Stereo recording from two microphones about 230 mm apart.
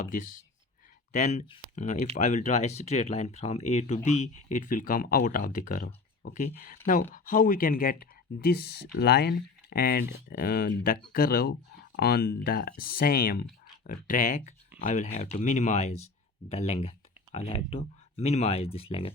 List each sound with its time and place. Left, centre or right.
0.0 s speech: left